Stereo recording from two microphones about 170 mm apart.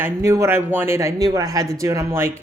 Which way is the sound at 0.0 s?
20° right (ahead or behind).